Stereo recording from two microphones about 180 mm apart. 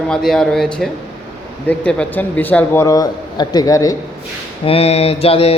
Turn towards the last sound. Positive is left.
turn(degrees=35)  # may be behind; listen again after turning